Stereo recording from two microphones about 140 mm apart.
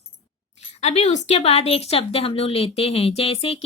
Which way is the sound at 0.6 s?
50° left (ahead or behind).